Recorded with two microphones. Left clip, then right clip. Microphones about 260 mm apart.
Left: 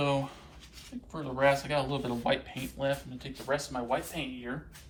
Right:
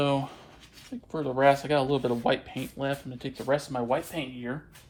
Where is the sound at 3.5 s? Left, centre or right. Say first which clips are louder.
Right 3 dB; right.